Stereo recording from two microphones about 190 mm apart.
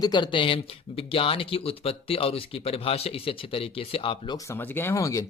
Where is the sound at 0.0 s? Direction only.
25° left (ahead or behind).